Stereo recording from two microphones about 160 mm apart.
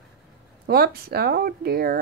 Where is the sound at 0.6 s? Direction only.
75° right (ahead or behind).